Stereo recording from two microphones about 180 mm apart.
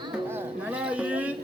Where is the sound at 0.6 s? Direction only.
5° right (ahead or behind).